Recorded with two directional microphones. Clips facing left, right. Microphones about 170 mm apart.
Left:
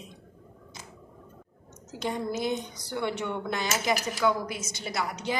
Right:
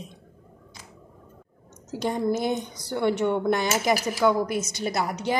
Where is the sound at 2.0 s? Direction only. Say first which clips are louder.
Right 5 dB; 50° right (ahead or behind).